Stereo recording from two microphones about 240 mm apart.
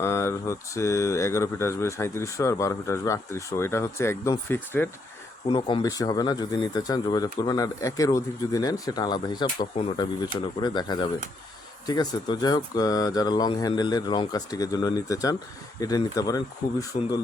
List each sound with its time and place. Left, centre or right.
0.0 s speech: centre
5.5 s speech: left
16.9 s speech: left